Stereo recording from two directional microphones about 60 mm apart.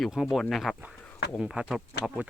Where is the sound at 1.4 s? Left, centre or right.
Centre.